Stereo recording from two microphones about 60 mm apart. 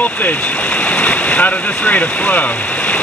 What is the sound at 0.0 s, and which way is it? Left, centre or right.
Speech, left.